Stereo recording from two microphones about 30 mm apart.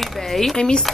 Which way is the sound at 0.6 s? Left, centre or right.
Left.